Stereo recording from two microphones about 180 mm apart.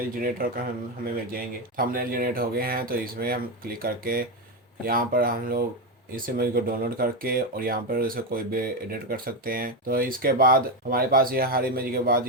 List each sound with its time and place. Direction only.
0.2 s speech: 55° right (ahead or behind)